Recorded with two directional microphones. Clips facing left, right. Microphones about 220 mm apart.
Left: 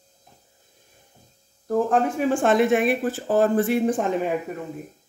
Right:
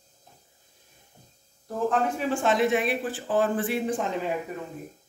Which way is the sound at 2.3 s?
50° left (ahead or behind).